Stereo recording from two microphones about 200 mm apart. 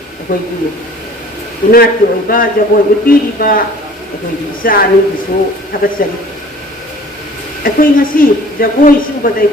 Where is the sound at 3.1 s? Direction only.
45° left (ahead or behind).